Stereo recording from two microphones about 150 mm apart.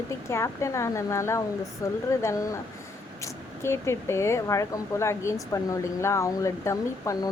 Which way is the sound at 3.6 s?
15° left (ahead or behind).